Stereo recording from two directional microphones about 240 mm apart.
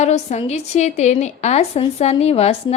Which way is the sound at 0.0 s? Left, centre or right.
Left.